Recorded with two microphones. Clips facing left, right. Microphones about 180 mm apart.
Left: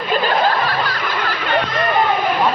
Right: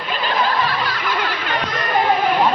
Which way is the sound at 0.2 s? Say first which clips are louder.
Left 1 dB; 45° left (ahead or behind).